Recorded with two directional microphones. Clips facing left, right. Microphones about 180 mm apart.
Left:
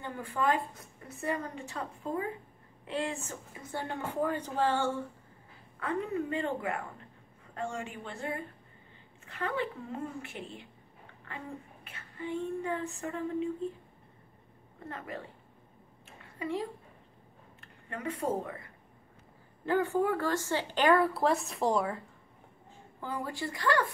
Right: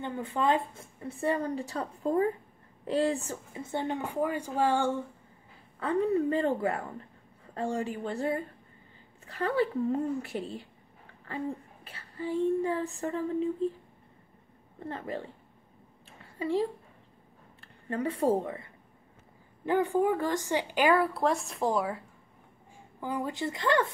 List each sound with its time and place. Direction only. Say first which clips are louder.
0.0 s a woman's voice: right 2 dB; 20° right (ahead or behind)
3.7 s a woman's voice: right 3 dB; 20° right (ahead or behind)
5.8 s a woman's voice: right 6 dB; 35° right (ahead or behind)
14.9 s a woman's voice: right 5 dB; 30° right (ahead or behind)
16.1 s a sound: right 5 dB; 30° right (ahead or behind)
17.6 s speech: right 9 dB; 35° right (ahead or behind)
19.6 s a woman's voice: right 2 dB; 15° right (ahead or behind)
22.9 s a woman's voice: right 4 dB; 15° right (ahead or behind)